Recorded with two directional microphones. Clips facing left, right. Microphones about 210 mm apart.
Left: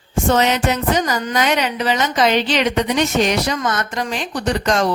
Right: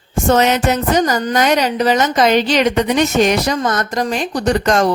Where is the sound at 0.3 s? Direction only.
45° right (ahead or behind).